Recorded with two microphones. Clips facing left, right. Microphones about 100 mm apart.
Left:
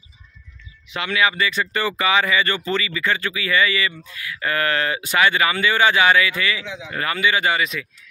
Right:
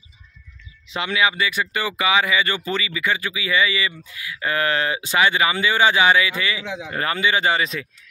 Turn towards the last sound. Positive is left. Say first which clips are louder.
# even
turn(degrees=-30)  # may be behind; listen again after turning